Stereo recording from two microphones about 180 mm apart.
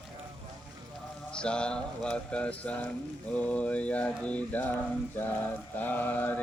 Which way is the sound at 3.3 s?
5° left (ahead or behind).